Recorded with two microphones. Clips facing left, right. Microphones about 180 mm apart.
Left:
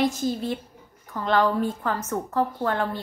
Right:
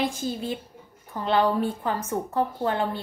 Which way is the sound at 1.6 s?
10° right (ahead or behind).